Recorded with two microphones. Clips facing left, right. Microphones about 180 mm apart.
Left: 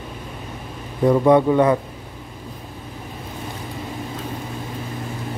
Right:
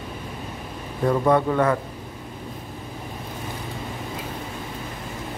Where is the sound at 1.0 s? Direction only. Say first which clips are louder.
Left 5 dB; 15° left (ahead or behind).